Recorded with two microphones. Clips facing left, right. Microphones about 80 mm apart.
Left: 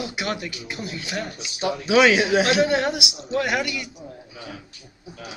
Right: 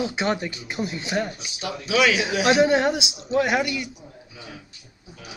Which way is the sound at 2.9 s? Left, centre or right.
Right.